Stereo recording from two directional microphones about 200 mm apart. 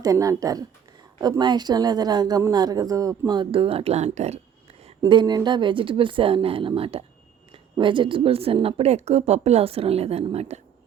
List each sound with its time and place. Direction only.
0.0 s speech: 15° right (ahead or behind); by 4.4 s 35° right (ahead or behind)
5.0 s a woman's voice: 20° right (ahead or behind)